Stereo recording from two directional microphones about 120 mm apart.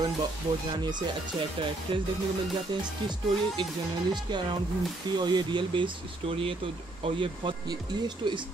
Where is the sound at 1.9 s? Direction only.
55° right (ahead or behind).